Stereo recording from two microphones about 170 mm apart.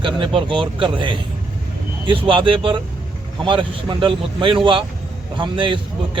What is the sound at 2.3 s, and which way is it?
A man's voice, 30° right (ahead or behind).